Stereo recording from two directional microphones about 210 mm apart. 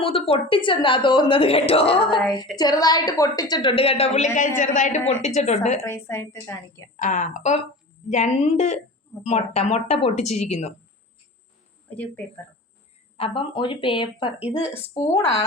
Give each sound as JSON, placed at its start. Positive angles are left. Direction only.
{"t": 0.0, "sound": "a woman's voice", "side_deg": 25}
{"t": 5.8, "sound": "a woman's voice", "side_deg": 10}
{"t": 6.9, "sound": "a woman's voice", "side_deg": 35}
{"t": 11.9, "sound": "a woman's voice", "side_deg": 5}
{"t": 13.1, "sound": "a woman's voice", "side_deg": 25}